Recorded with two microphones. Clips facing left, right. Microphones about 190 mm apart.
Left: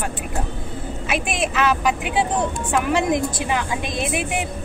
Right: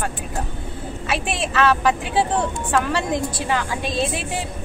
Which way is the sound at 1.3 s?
15° left (ahead or behind).